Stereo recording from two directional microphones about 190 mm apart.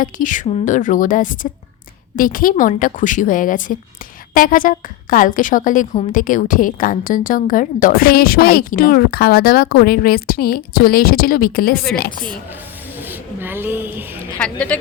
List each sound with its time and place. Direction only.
0.0 s a woman's voice: 45° left (ahead or behind)
13.0 s a sound: 10° right (ahead or behind)
14.7 s speech: 5° left (ahead or behind)